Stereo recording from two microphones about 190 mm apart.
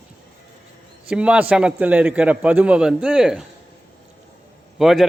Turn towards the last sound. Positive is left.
turn(degrees=0)  # may be behind; listen again after turning